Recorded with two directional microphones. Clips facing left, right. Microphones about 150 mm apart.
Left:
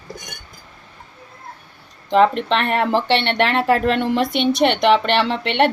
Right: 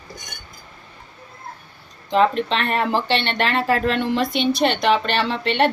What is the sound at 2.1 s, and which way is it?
Speech, 65° left (ahead or behind).